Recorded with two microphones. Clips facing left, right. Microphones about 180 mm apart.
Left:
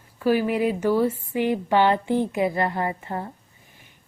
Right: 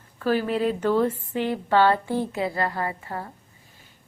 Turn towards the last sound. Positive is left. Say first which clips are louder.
# left 3 dB
turn(degrees=25)  # may be behind; listen again after turning